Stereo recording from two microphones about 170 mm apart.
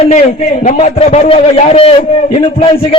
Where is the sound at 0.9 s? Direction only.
35° left (ahead or behind).